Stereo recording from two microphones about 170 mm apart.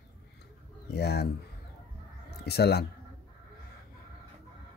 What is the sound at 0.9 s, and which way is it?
Speech, 75° left (ahead or behind).